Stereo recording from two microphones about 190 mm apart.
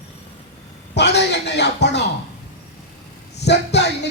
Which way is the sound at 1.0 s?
65° left (ahead or behind).